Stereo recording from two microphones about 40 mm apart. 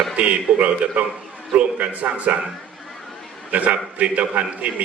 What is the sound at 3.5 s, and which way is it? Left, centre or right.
A man's voice, right.